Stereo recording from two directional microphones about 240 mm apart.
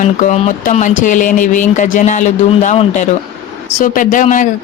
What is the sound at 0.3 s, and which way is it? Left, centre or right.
Speech, left.